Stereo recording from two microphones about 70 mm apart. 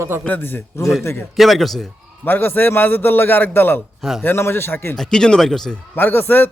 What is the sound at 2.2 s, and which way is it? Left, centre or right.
A man's voice, left.